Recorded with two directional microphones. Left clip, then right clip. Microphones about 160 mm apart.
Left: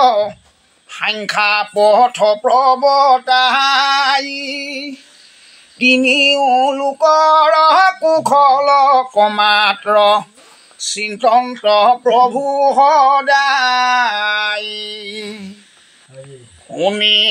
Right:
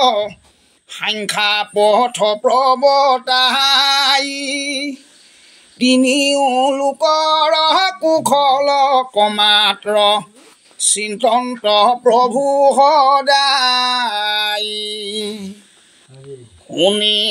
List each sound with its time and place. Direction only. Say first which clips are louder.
0.0 s female singing: left 3 dB; 30° right (ahead or behind)
16.7 s speech: left 1 dB; 25° right (ahead or behind)